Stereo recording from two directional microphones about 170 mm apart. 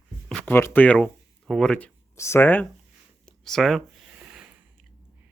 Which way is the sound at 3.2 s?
5° left (ahead or behind).